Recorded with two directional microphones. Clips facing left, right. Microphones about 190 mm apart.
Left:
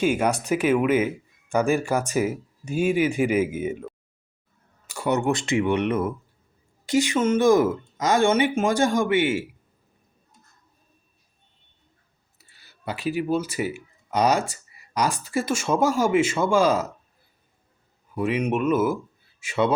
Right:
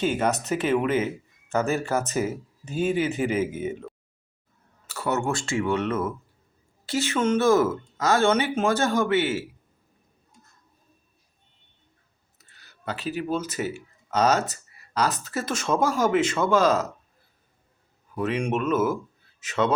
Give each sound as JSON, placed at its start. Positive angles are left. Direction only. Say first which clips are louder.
{"t": 0.0, "sound": "speech", "louder": "left 2 dB", "side_deg": 10}
{"t": 4.9, "sound": "speech", "louder": "left 3 dB", "side_deg": 15}
{"t": 12.4, "sound": "speech", "louder": "right 1 dB", "side_deg": 10}
{"t": 18.1, "sound": "speech", "louder": "left 2 dB", "side_deg": 10}